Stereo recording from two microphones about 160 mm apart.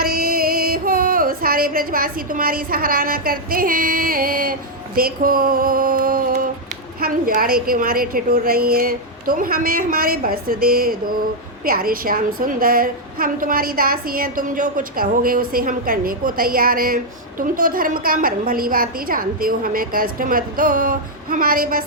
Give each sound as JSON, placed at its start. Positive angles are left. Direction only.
{"t": 0.0, "sound": "music", "side_deg": -65}
{"t": 4.9, "sound": "a sound", "side_deg": -65}
{"t": 7.0, "sound": "a woman's voice", "side_deg": -65}